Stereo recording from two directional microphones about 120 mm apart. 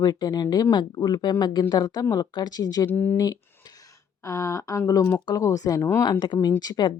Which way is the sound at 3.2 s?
30° left (ahead or behind).